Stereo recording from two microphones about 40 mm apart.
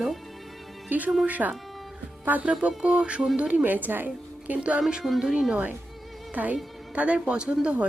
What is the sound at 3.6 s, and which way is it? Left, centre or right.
Speech, right.